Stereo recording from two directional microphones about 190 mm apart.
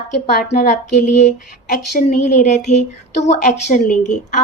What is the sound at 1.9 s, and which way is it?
A woman's voice, 45° left (ahead or behind).